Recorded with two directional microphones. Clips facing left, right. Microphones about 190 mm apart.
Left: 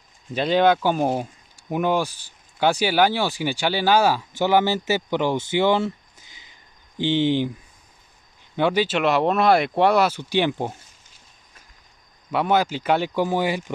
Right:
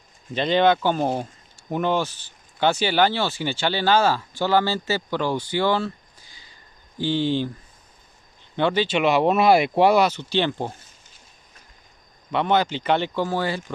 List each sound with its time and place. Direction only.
0.3 s speech: 5° left (ahead or behind)
7.0 s speech: 20° left (ahead or behind)
8.5 s speech: 10° left (ahead or behind)
12.3 s speech: 5° left (ahead or behind)